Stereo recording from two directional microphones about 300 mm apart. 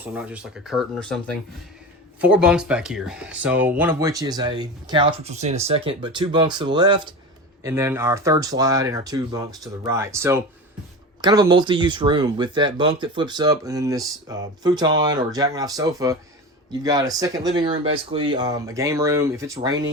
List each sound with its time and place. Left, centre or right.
0.0 s speech: centre